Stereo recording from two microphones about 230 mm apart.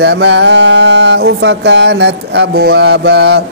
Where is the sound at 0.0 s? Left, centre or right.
Right.